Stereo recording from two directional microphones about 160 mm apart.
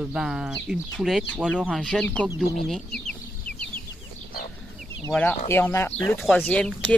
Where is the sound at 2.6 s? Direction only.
5° left (ahead or behind).